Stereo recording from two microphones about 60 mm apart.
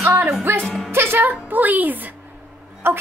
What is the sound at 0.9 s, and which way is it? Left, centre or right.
A woman's voice, right.